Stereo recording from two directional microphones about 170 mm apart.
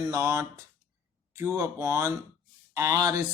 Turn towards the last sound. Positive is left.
turn(degrees=-20)  # may be behind; listen again after turning